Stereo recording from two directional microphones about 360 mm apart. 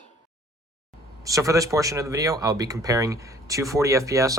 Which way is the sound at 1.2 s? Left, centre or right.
Centre.